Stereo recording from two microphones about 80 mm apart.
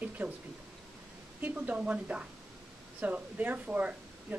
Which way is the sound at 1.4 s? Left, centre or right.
Centre.